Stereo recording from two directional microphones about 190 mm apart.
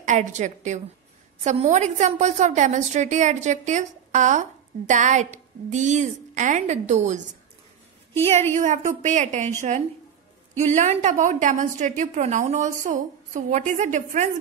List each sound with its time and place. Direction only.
0.0 s a woman's voice: 40° right (ahead or behind)